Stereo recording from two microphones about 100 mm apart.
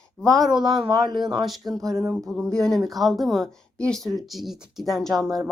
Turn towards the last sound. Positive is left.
turn(degrees=5)  # may be behind; listen again after turning